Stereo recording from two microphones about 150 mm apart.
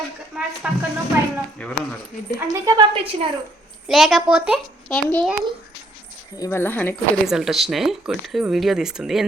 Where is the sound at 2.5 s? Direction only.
25° right (ahead or behind).